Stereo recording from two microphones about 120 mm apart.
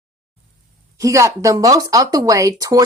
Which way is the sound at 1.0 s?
25° right (ahead or behind).